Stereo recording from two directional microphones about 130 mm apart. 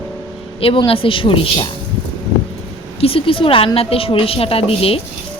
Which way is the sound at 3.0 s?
45° left (ahead or behind).